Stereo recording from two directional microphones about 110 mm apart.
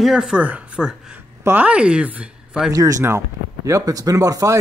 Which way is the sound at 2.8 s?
30° right (ahead or behind).